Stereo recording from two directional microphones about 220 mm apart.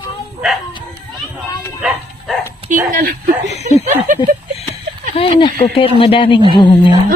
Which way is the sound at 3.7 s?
35° right (ahead or behind).